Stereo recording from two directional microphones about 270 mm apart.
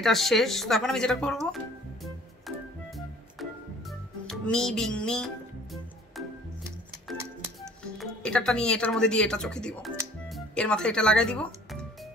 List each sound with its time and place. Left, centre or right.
0.0 s speech: centre
2.4 s music: centre
8.0 s speech: centre